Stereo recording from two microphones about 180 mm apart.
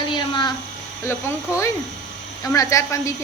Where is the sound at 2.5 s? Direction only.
15° left (ahead or behind).